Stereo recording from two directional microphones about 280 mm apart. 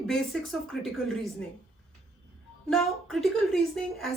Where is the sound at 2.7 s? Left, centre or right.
Centre.